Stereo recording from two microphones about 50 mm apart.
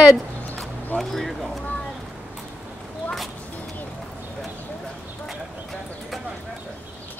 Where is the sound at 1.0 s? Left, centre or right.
Centre.